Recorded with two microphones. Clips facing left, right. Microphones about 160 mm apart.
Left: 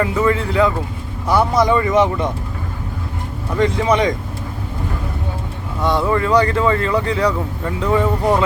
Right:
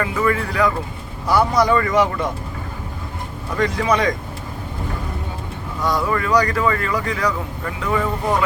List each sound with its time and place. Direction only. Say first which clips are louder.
0.0 s speech: left 3 dB; 20° left (ahead or behind)
3.6 s speech: left 3 dB; 25° left (ahead or behind)
5.8 s speech: left 4 dB; 25° left (ahead or behind)